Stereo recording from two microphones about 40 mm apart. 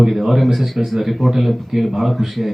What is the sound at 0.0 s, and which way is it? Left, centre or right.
Speech, centre.